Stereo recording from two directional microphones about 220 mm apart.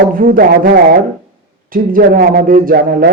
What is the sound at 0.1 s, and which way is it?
Speech, 40° right (ahead or behind).